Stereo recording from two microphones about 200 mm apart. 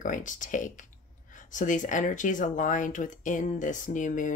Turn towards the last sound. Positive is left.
turn(degrees=40)  # may be behind; listen again after turning